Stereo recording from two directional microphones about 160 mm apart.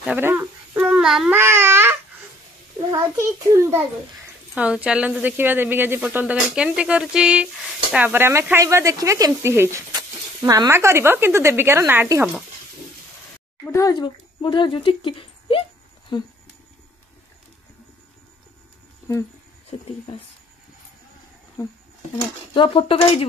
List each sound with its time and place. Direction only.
0.0 s a sound: 10° right (ahead or behind)
1.3 s babbling: 15° right (ahead or behind)
2.9 s speech: 20° right (ahead or behind)
13.7 s speech: 20° left (ahead or behind)
19.1 s speech: 20° left (ahead or behind)
22.5 s speech: 35° left (ahead or behind)